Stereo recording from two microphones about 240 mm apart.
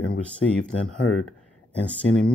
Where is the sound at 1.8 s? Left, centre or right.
Centre.